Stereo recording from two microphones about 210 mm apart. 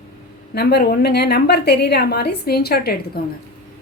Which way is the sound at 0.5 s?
50° left (ahead or behind).